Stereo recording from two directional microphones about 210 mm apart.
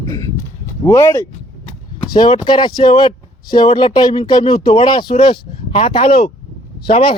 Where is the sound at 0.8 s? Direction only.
15° left (ahead or behind).